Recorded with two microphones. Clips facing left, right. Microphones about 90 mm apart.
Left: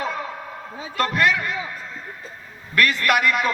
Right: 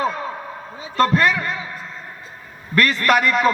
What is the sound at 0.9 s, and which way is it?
Speech, 35° right (ahead or behind).